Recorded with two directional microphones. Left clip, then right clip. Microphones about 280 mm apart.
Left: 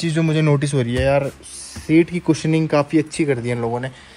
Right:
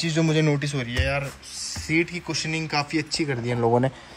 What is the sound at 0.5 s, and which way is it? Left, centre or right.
A woman's voice, centre.